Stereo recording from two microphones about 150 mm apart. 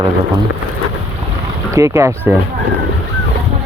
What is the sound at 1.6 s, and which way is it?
Speech, 20° right (ahead or behind).